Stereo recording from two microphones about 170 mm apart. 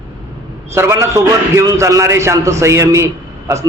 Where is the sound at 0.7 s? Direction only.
15° right (ahead or behind).